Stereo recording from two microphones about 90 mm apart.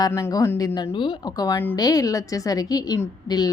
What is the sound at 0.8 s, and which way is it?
Speech, 65° left (ahead or behind).